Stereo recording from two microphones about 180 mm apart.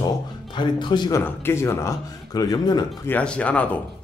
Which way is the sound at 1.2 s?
15° left (ahead or behind).